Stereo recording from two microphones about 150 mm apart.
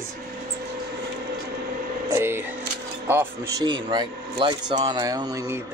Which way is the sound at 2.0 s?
15° right (ahead or behind).